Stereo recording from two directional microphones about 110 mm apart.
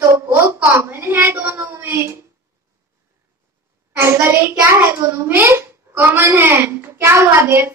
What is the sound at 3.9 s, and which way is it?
A child's voice, 20° right (ahead or behind).